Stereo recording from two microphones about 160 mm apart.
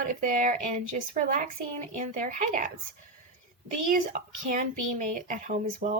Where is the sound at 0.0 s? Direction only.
55° right (ahead or behind).